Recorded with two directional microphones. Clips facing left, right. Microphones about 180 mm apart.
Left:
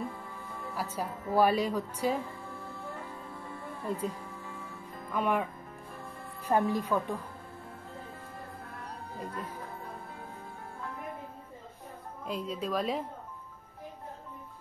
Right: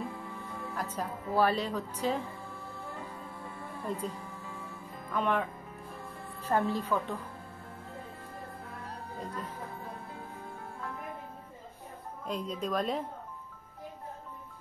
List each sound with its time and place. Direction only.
0.0 s music: centre (ahead or behind)
4.6 s music: 10° left (ahead or behind)
6.4 s a woman's voice: 15° left (ahead or behind)
8.6 s music: centre (ahead or behind)
12.3 s a woman's voice: 5° left (ahead or behind)